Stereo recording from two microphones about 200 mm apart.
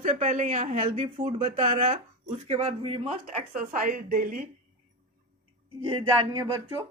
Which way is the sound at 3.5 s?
40° right (ahead or behind).